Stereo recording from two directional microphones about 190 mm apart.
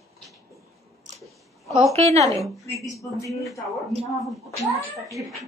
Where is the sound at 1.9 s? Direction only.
35° right (ahead or behind).